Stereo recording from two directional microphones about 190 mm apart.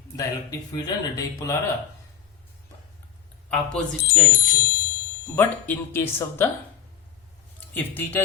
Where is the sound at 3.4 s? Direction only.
5° left (ahead or behind).